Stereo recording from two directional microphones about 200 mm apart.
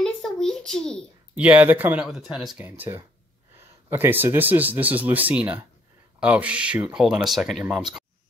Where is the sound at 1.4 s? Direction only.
5° right (ahead or behind).